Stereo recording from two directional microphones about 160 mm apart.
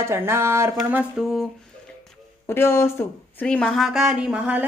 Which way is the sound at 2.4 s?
15° left (ahead or behind).